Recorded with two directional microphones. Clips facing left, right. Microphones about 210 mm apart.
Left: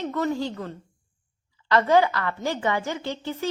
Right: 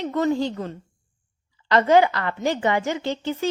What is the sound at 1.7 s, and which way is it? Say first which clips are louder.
A woman's voice: right 3 dB; 25° right (ahead or behind).